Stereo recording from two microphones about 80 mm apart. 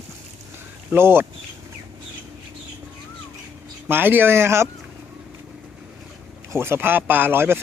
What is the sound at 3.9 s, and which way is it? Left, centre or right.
Speech, right.